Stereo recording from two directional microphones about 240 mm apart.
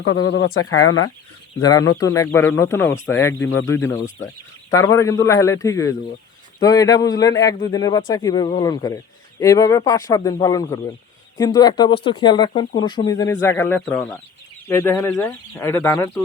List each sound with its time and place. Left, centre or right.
0.0 s speech: left
1.6 s speech: centre